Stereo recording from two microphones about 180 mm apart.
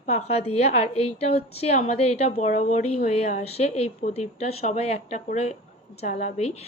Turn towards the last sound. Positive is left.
turn(degrees=35)  # may be behind; listen again after turning